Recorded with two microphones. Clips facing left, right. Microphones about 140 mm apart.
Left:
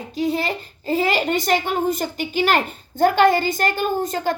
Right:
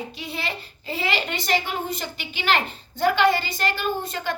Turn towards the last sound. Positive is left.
turn(degrees=40)  # may be behind; listen again after turning